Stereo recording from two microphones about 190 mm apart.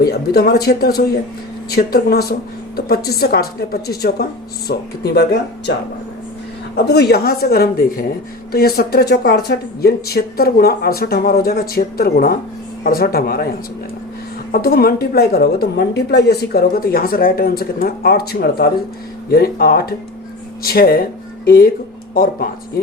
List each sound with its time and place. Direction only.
0.0 s speech: 55° left (ahead or behind)
6.8 s a woman's voice: 60° left (ahead or behind)
14.5 s a woman's voice: 50° left (ahead or behind)